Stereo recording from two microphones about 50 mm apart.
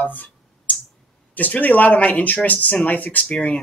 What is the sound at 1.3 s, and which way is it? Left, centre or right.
Speech, left.